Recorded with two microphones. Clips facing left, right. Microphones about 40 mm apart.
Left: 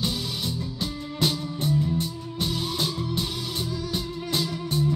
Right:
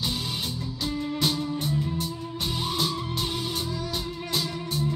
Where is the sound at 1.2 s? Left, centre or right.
Left.